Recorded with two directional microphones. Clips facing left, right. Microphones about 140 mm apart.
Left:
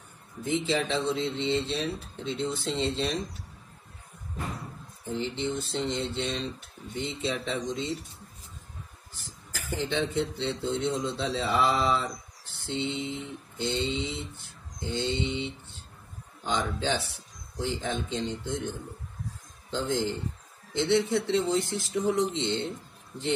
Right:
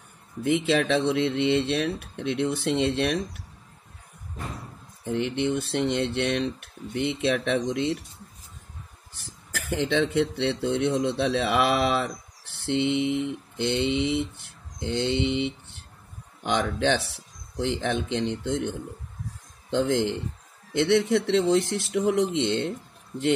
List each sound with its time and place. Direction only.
0.4 s speech: 70° right (ahead or behind)
5.1 s speech: 70° right (ahead or behind)
9.5 s speech: 75° right (ahead or behind)
20.7 s speech: 85° right